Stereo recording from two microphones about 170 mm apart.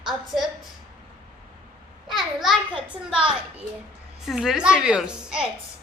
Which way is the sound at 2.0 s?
Centre (ahead or behind).